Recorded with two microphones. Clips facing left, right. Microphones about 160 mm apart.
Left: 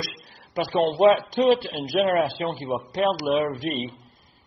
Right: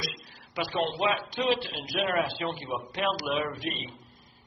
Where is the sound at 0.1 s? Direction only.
40° left (ahead or behind).